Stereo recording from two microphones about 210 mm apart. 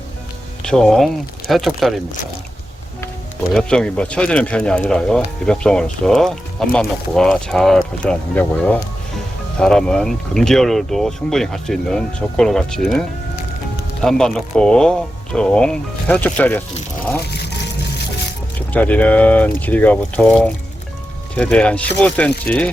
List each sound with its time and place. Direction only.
0.6 s speech: 5° left (ahead or behind)
3.5 s speech: 5° left (ahead or behind)
17.3 s music: 50° left (ahead or behind)
18.7 s speech: 5° left (ahead or behind)